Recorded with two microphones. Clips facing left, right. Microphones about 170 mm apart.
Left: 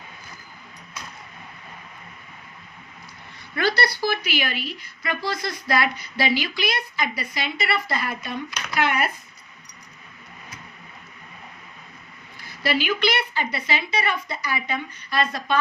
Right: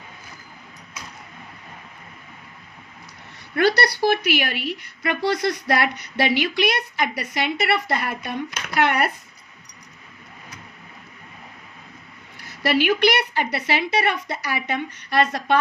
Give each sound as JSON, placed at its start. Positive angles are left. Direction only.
{"t": 3.6, "sound": "a woman's voice", "side_deg": -65}
{"t": 12.6, "sound": "a woman's voice", "side_deg": -65}